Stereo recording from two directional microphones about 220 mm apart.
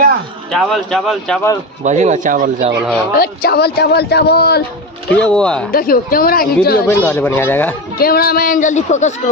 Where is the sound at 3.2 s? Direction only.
45° left (ahead or behind).